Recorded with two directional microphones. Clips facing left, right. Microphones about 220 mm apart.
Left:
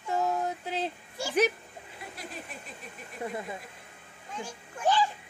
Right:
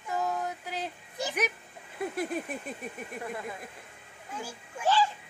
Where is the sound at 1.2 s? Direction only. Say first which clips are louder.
Right 1 dB; 20° right (ahead or behind).